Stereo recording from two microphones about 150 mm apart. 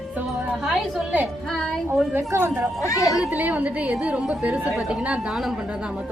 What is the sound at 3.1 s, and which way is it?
A woman's voice, 10° right (ahead or behind).